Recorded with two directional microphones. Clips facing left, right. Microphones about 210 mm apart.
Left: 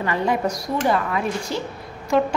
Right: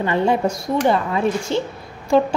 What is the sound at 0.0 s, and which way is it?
A woman's voice, 25° right (ahead or behind).